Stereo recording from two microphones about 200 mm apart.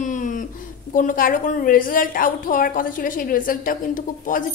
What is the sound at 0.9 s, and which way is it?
A woman's voice, 45° left (ahead or behind).